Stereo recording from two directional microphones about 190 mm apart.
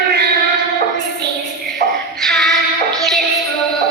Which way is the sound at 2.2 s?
Centre (ahead or behind).